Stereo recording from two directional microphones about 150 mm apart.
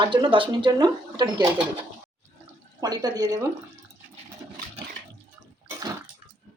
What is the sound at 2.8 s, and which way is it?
Speech, 25° right (ahead or behind).